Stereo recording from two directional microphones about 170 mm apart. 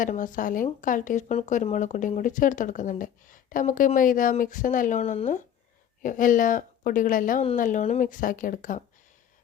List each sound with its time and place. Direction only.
0.0 s speech: 50° left (ahead or behind)